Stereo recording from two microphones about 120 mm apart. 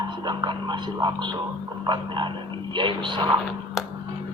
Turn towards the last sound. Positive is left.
turn(degrees=-40)  # may be behind; listen again after turning